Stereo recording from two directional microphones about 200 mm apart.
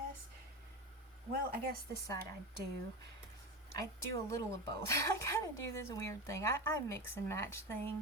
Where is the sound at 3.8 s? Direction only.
15° left (ahead or behind).